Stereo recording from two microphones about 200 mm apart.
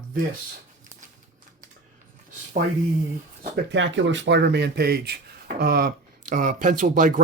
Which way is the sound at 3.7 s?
65° right (ahead or behind).